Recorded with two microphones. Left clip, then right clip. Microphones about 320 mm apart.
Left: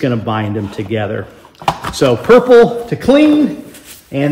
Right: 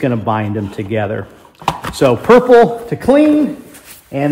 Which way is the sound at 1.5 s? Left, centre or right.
Centre.